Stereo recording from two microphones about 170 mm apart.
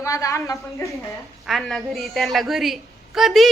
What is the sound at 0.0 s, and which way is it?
Speech, 20° left (ahead or behind).